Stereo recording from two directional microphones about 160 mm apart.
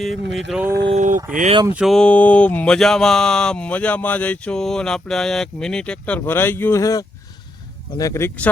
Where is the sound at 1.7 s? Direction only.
Centre (ahead or behind).